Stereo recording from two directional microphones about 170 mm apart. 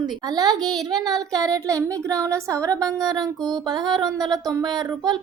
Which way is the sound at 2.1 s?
5° left (ahead or behind).